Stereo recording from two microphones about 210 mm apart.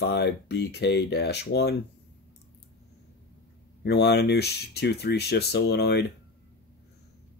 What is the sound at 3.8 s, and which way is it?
Speech, 50° left (ahead or behind).